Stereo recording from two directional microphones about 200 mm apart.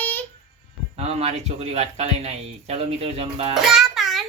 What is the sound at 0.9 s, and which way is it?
Speech, 30° right (ahead or behind).